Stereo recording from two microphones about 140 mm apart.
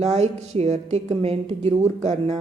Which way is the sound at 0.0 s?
50° right (ahead or behind).